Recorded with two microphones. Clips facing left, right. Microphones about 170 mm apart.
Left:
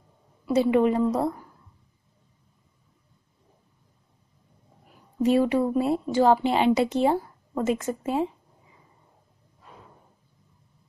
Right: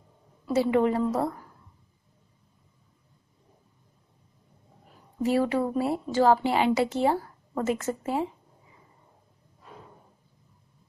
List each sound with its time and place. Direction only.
0.5 s a woman's voice: 20° left (ahead or behind)
5.2 s a woman's voice: 20° left (ahead or behind)